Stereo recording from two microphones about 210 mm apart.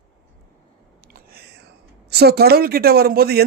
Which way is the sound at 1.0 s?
45° right (ahead or behind).